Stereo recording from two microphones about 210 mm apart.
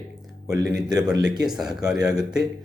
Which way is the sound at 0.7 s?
5° right (ahead or behind).